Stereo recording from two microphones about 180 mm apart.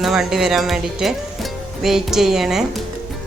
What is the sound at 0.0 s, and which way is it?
Speech, centre (ahead or behind).